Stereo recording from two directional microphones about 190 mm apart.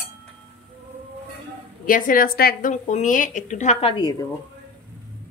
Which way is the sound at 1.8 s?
45° left (ahead or behind).